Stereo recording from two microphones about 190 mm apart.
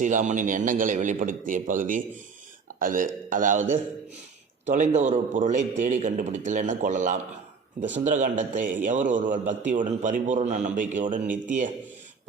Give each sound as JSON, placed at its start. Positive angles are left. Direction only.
{"t": 0.0, "sound": "a man's voice", "side_deg": -40}